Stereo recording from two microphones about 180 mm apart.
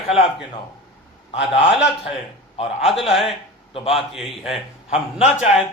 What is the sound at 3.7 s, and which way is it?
Speech, 30° left (ahead or behind).